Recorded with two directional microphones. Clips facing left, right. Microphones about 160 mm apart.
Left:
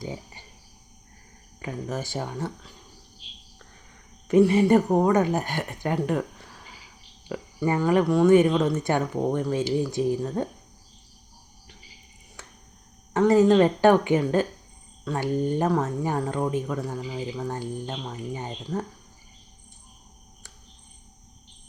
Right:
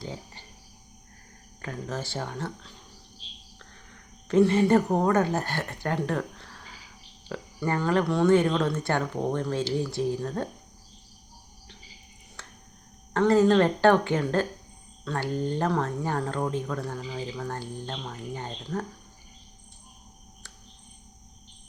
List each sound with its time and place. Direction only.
1.6 s speech: 15° left (ahead or behind)
4.3 s speech: 10° left (ahead or behind)
13.1 s speech: 20° left (ahead or behind)